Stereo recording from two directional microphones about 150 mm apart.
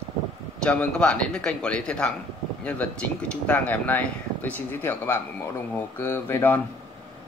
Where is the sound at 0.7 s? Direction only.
10° left (ahead or behind).